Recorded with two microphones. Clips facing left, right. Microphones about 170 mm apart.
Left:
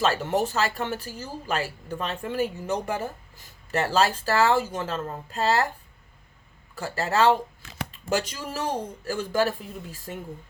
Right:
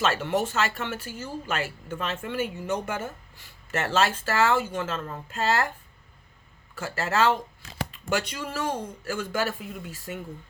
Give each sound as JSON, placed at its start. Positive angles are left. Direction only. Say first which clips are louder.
{"t": 0.0, "sound": "speech", "louder": "left 1 dB", "side_deg": 35}
{"t": 6.7, "sound": "speech", "louder": "left 2 dB", "side_deg": 35}